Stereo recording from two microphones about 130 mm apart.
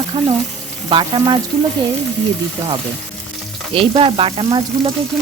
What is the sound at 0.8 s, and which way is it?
Sizzle, 40° right (ahead or behind).